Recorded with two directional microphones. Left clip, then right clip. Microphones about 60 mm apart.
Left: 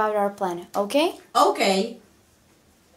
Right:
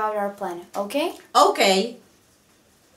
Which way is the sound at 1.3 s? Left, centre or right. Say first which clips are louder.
Right 4 dB; right.